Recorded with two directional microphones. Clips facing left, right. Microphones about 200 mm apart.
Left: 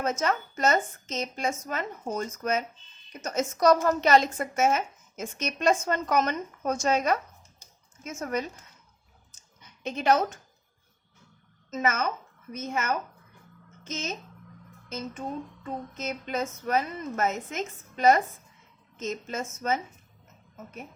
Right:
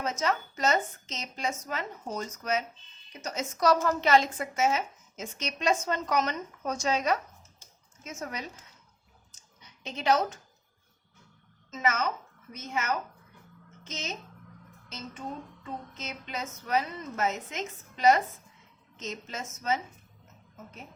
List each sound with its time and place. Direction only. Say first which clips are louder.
0.0 s a woman's voice: left 2 dB; 50° left (ahead or behind)
9.6 s a sound: left 6 dB; 55° left (ahead or behind)
11.7 s a woman's voice: left 2 dB; 50° left (ahead or behind)